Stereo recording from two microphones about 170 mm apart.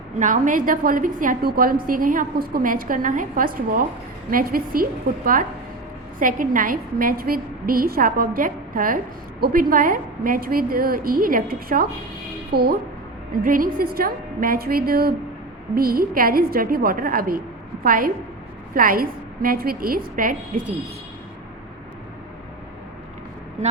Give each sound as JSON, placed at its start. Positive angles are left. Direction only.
{"t": 0.2, "sound": "a woman's voice", "side_deg": -50}
{"t": 13.4, "sound": "a woman's voice", "side_deg": -55}